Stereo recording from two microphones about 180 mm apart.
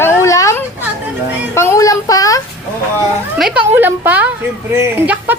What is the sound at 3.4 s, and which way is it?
Speech, 5° right (ahead or behind).